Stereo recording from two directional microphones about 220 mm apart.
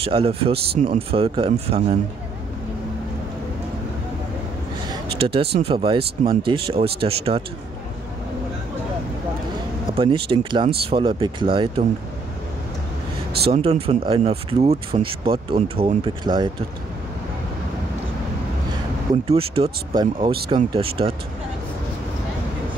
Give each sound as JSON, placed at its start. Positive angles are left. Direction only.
{"t": 0.0, "sound": "speech", "side_deg": -25}
{"t": 5.2, "sound": "speech", "side_deg": -25}
{"t": 9.9, "sound": "speech", "side_deg": -25}
{"t": 13.5, "sound": "speech", "side_deg": -25}
{"t": 19.2, "sound": "speech", "side_deg": -25}